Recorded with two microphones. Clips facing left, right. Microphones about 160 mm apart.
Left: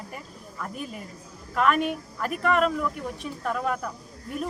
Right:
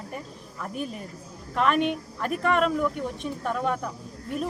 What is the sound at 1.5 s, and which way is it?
Speech, 5° left (ahead or behind).